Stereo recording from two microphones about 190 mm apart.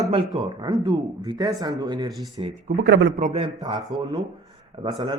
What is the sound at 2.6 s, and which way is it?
Speech, 60° right (ahead or behind).